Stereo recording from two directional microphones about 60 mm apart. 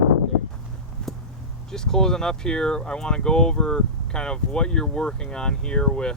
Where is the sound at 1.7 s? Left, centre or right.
Centre.